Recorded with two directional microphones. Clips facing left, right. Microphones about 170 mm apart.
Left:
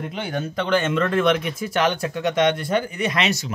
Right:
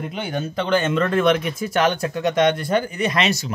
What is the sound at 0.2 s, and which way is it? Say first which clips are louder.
Speech: right 1 dB; 20° right (ahead or behind).